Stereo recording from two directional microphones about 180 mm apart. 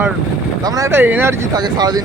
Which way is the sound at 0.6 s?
20° right (ahead or behind).